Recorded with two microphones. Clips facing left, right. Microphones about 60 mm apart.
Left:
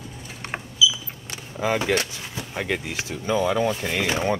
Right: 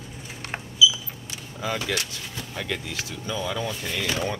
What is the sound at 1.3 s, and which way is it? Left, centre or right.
Vehicle, left.